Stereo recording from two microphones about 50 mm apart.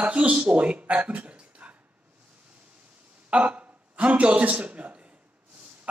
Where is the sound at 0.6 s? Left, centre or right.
Right.